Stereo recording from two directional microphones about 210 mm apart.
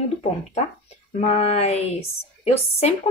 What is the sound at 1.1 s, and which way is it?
A woman's voice, 30° left (ahead or behind).